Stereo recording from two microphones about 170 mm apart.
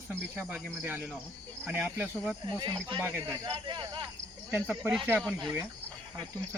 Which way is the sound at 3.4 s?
30° right (ahead or behind).